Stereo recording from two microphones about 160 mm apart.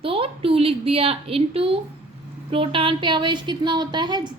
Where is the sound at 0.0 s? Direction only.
35° right (ahead or behind).